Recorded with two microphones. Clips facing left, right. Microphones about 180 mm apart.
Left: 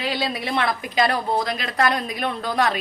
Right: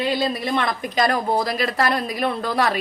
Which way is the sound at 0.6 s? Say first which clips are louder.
Left 3 dB; 45° right (ahead or behind).